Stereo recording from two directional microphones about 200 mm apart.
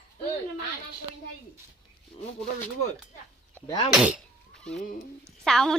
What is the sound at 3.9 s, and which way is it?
A woman's voice, 5° right (ahead or behind).